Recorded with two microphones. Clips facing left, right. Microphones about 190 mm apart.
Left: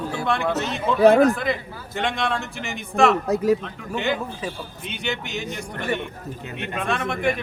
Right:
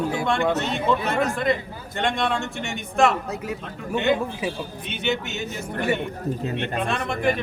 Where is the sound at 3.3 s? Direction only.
35° left (ahead or behind).